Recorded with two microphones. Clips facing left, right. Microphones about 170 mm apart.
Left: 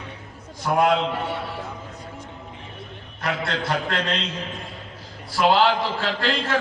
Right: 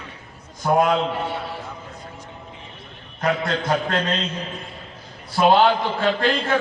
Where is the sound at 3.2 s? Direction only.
75° left (ahead or behind).